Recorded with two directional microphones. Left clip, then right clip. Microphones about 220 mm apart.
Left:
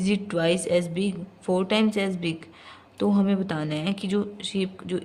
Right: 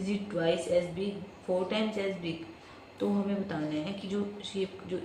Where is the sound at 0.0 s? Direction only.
60° left (ahead or behind).